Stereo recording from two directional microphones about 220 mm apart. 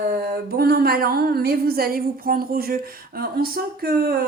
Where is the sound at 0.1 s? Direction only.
45° right (ahead or behind).